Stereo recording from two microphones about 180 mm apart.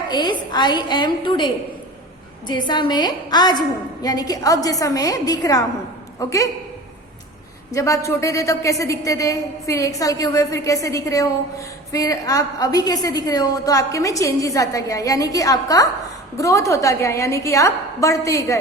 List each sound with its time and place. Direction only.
0.1 s a woman's voice: 25° left (ahead or behind)
2.5 s a woman's voice: 25° left (ahead or behind)
7.7 s a woman's voice: 15° left (ahead or behind)